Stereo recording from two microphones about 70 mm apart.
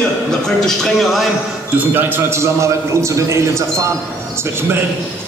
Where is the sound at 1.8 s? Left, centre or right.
Right.